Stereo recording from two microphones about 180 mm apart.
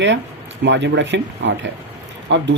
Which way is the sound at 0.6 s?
80° right.